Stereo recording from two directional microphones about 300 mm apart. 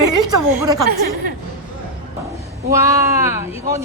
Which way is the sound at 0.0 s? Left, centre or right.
Right.